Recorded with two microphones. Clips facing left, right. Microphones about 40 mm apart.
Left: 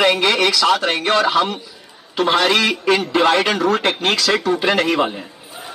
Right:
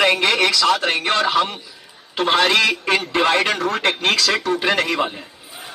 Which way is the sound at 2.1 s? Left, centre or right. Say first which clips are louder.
Left 1 dB; right.